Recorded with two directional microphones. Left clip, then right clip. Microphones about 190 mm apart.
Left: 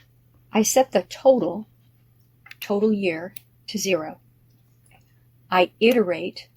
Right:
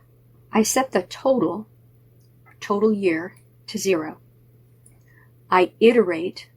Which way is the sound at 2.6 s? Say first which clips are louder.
Right 2 dB; 40° left (ahead or behind).